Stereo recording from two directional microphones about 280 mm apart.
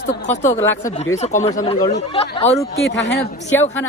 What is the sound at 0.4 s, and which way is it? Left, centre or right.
Speech, centre.